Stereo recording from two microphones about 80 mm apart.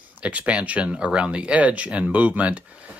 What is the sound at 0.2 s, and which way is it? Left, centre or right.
Speech, centre.